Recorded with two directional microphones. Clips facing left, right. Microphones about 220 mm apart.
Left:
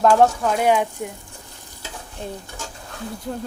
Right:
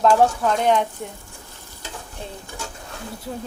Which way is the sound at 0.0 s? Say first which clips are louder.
Left 1 dB; 5° left (ahead or behind).